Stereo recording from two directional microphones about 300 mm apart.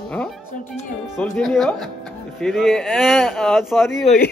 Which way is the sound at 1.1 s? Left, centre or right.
Centre.